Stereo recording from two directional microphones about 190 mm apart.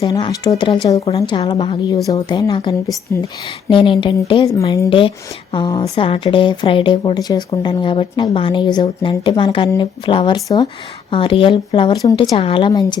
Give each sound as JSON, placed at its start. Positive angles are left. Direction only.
{"t": 0.1, "sound": "speech", "side_deg": 20}
{"t": 3.1, "sound": "speech", "side_deg": 10}
{"t": 3.7, "sound": "speech", "side_deg": 25}